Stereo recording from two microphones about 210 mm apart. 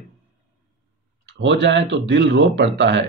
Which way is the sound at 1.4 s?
55° right (ahead or behind).